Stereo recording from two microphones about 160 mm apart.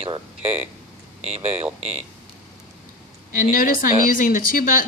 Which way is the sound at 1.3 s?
40° right (ahead or behind).